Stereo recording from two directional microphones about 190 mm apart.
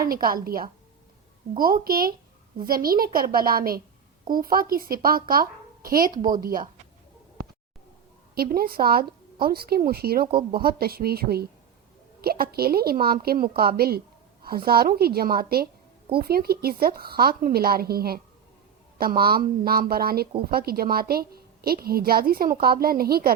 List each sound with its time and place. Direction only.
0.1 s speech: 50° right (ahead or behind)
8.4 s speech: 50° right (ahead or behind)